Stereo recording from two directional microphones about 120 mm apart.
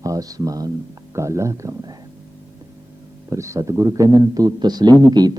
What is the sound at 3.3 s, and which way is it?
A man's voice, 25° right (ahead or behind).